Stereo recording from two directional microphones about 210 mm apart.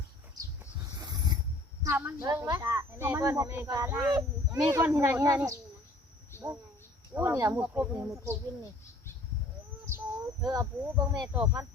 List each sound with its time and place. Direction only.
0.6 s pulleys: 15° right (ahead or behind)
1.8 s speech: 10° right (ahead or behind)
6.3 s a sound: 10° left (ahead or behind)
7.1 s speech: 15° right (ahead or behind)
10.4 s speech: 20° right (ahead or behind)